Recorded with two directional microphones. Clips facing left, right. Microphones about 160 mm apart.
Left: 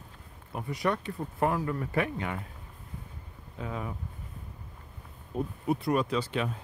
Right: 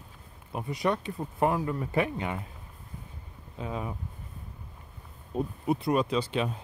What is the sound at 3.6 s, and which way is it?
Speech, 20° right (ahead or behind).